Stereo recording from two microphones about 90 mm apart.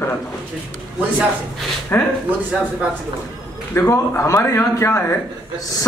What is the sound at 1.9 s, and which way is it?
Speech, 20° left (ahead or behind).